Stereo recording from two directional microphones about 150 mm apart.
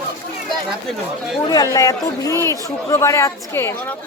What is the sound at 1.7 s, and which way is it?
A woman's voice, 25° left (ahead or behind).